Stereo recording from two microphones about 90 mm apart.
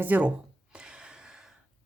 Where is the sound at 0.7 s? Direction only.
10° right (ahead or behind).